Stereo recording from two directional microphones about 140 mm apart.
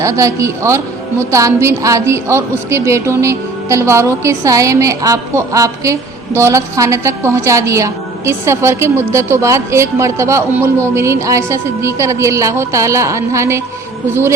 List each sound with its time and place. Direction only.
0.0 s a woman's voice: 20° right (ahead or behind)